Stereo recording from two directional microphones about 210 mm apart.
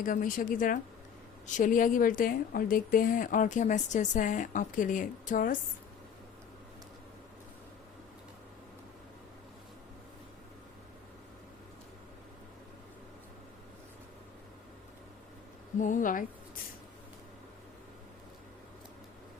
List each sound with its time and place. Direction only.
0.0 s a woman's voice: 40° left (ahead or behind)
15.8 s a woman's voice: 35° left (ahead or behind)